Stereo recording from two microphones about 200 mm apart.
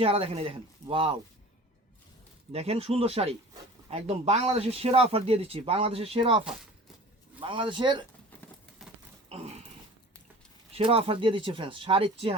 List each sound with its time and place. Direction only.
0.0 s speech: 30° right (ahead or behind)
2.5 s speech: 30° right (ahead or behind)
8.8 s pig: centre (ahead or behind)
9.3 s livestock: 30° right (ahead or behind)
10.7 s speech: 30° right (ahead or behind)